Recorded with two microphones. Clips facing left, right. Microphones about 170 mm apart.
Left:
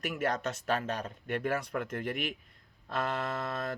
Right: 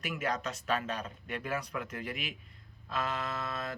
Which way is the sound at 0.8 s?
50° left (ahead or behind).